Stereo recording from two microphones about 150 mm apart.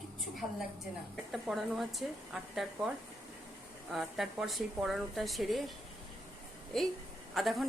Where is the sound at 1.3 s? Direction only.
Centre (ahead or behind).